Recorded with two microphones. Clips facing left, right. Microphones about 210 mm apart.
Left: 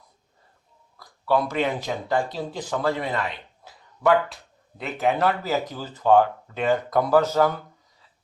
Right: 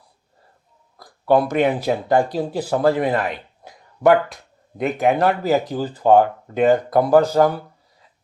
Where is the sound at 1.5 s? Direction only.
50° right (ahead or behind).